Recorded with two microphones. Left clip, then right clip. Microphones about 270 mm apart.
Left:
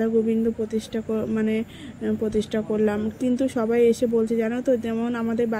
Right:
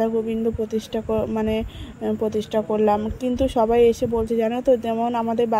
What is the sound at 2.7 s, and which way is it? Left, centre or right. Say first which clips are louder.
Speech: right 4 dB; right.